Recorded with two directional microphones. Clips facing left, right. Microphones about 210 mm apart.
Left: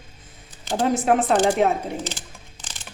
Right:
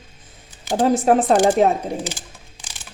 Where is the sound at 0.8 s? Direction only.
35° right (ahead or behind).